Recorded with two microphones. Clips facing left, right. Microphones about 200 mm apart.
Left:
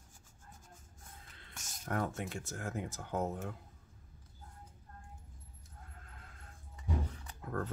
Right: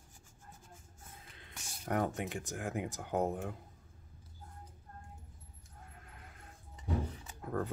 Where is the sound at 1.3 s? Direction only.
15° right (ahead or behind).